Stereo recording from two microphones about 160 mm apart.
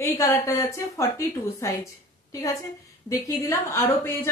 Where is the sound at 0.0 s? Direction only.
20° left (ahead or behind).